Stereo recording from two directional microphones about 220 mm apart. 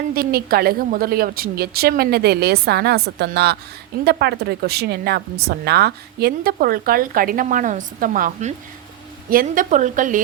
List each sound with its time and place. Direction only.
0.1 s a woman's voice: 45° right (ahead or behind)